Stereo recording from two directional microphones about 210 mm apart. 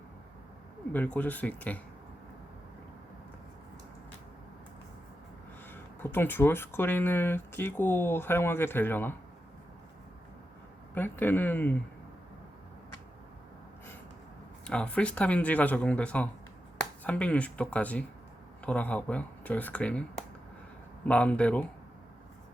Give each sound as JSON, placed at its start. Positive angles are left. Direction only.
{"t": 0.9, "sound": "speech", "side_deg": 5}
{"t": 5.7, "sound": "speech", "side_deg": 10}
{"t": 10.9, "sound": "speech", "side_deg": 10}
{"t": 14.7, "sound": "speech", "side_deg": 5}